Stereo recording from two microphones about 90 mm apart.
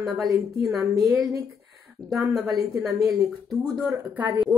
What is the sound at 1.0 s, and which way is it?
Speech, 5° right (ahead or behind).